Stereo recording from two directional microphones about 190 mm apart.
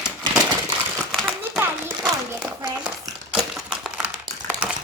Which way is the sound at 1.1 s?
5° right (ahead or behind).